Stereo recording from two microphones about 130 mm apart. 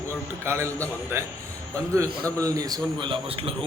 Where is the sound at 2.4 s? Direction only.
30° right (ahead or behind); by 3.5 s 45° right (ahead or behind).